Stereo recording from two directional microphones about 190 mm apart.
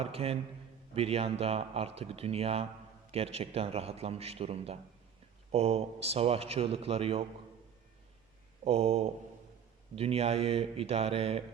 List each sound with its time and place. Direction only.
0.0 s a man's voice: 30° right (ahead or behind)
8.6 s a man's voice: 30° right (ahead or behind)